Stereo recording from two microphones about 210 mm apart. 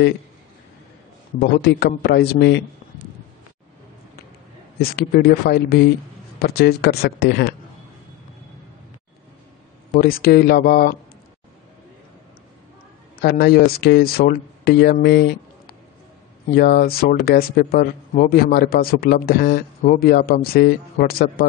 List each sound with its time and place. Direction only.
1.4 s speech: 50° left (ahead or behind)
4.9 s speech: 45° left (ahead or behind)
9.9 s speech: 45° left (ahead or behind)
13.2 s speech: 50° left (ahead or behind)